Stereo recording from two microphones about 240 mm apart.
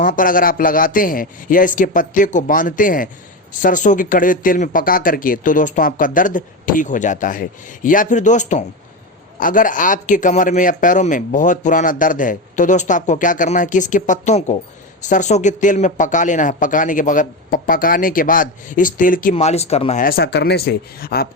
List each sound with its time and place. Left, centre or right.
0.0 s a man's voice: left